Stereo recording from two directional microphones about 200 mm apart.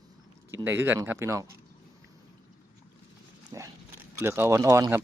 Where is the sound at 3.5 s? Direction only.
15° right (ahead or behind).